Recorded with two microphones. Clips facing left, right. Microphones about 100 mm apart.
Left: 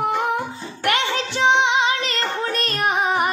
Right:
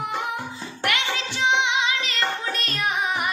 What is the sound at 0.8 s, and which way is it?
Music, 40° left (ahead or behind).